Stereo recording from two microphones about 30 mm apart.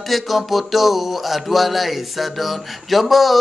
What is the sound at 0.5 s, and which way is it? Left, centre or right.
A man's voice, centre.